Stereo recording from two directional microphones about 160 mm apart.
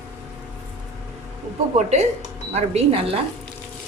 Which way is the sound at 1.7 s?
45° right (ahead or behind).